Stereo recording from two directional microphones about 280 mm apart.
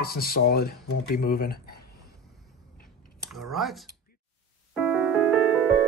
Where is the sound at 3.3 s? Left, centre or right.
Centre.